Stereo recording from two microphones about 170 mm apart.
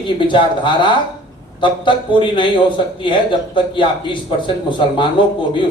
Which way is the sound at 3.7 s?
30° left (ahead or behind).